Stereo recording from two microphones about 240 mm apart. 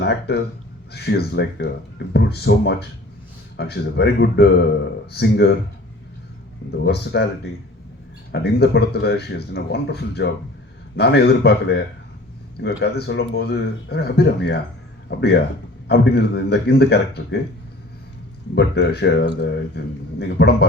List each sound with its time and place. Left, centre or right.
0.0 s speech: left
6.8 s speech: left
8.3 s speech: left
15.9 s speech: left
18.5 s speech: left